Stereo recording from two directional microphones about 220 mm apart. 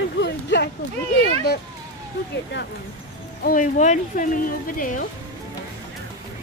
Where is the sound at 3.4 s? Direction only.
35° left (ahead or behind).